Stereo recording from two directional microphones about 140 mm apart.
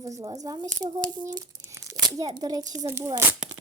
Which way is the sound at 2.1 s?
25° right (ahead or behind).